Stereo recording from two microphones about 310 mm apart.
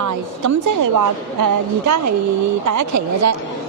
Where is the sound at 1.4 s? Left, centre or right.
Right.